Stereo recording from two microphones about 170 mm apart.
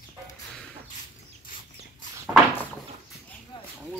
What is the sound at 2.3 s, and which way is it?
Door, 20° right (ahead or behind).